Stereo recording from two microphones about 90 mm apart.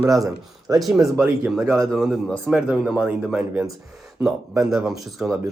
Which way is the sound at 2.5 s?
15° right (ahead or behind).